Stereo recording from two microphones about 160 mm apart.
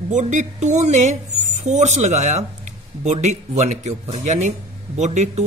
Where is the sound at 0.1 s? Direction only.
50° right (ahead or behind).